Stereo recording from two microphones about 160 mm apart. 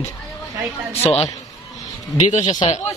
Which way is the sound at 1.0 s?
40° left (ahead or behind).